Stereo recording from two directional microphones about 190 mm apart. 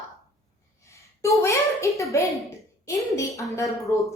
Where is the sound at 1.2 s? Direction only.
15° left (ahead or behind).